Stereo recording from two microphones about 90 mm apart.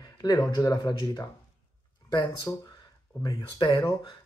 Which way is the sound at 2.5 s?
20° left (ahead or behind).